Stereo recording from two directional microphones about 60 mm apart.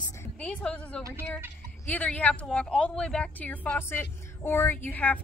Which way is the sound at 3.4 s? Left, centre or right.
Left.